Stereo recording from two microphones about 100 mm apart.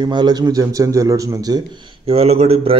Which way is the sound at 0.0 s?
45° right (ahead or behind).